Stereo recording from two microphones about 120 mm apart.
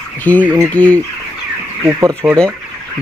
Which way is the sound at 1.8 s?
25° right (ahead or behind).